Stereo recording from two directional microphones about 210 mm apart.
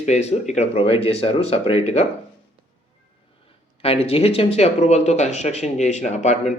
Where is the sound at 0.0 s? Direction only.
30° left (ahead or behind).